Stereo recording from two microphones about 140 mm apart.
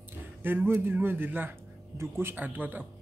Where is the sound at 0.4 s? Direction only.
15° right (ahead or behind).